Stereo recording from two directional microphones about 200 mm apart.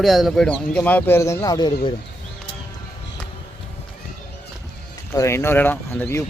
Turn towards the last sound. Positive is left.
turn(degrees=10)  # may be behind; listen again after turning